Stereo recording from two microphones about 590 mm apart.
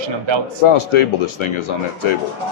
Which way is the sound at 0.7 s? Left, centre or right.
Left.